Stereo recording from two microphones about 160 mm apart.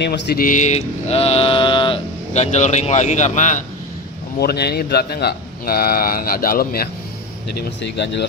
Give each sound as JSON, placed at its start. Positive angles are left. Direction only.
{"t": 0.0, "sound": "mantra", "side_deg": 85}
{"t": 2.3, "sound": "speech", "side_deg": 45}
{"t": 4.4, "sound": "a man's voice", "side_deg": 85}
{"t": 7.8, "sound": "speech", "side_deg": 90}